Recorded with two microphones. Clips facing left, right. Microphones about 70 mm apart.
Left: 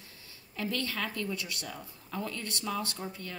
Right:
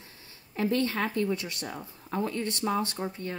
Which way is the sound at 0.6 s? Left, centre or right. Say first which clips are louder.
Right 7 dB; right.